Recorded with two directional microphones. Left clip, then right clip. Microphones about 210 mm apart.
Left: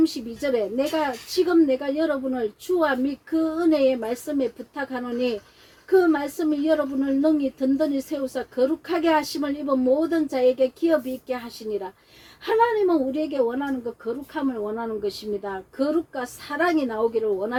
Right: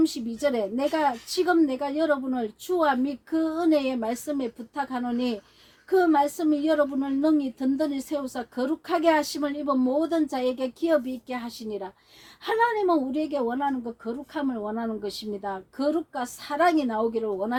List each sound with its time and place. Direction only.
0.0 s speech: 50° right (ahead or behind)